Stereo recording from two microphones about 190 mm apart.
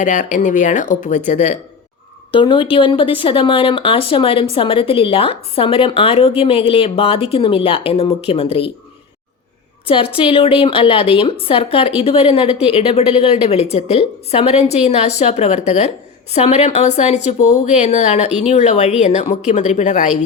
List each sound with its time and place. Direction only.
0.0 s a woman's voice: 40° left (ahead or behind)
2.3 s a woman's voice: 25° left (ahead or behind)
9.8 s a woman's voice: 30° left (ahead or behind)